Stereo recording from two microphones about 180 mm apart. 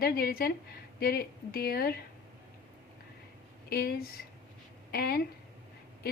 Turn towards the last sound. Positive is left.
turn(degrees=60)  # may be behind; listen again after turning